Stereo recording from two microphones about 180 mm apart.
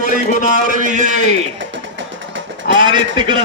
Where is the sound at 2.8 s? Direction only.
25° right (ahead or behind).